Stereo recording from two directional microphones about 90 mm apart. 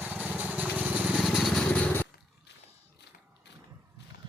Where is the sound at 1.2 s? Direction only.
Centre (ahead or behind).